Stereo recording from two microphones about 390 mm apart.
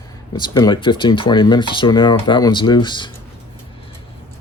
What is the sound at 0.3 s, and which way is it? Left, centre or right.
Speech, centre.